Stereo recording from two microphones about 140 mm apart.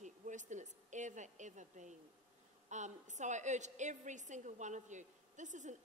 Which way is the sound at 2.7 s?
60° right (ahead or behind).